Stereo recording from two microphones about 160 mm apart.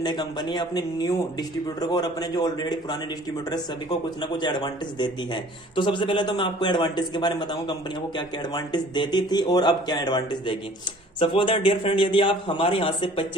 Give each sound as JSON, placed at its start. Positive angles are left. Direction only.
{"t": 0.0, "sound": "a man's voice", "side_deg": 30}
{"t": 4.0, "sound": "a man's voice", "side_deg": 30}